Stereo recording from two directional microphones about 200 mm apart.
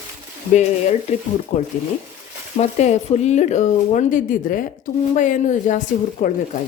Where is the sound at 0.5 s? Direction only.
35° left (ahead or behind).